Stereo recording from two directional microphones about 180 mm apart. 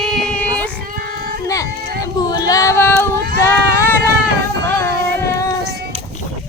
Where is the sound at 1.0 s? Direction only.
55° right (ahead or behind).